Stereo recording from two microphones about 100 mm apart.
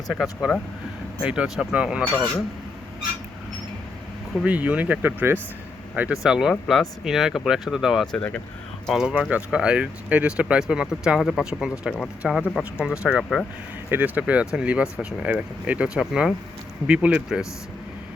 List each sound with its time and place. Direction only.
0.1 s speech: centre (ahead or behind)
4.4 s speech: 15° right (ahead or behind)
6.0 s speech: 10° right (ahead or behind)
8.0 s speech: 10° left (ahead or behind)
8.9 s speech: 5° right (ahead or behind)